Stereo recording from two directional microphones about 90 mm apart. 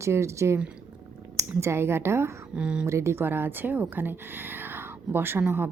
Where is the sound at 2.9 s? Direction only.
30° right (ahead or behind).